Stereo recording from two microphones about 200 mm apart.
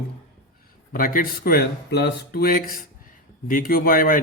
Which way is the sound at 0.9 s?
45° left (ahead or behind).